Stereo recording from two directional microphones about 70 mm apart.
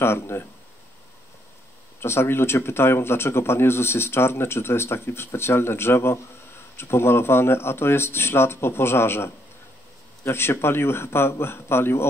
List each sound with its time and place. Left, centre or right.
0.0 s speech: left
2.0 s speech: left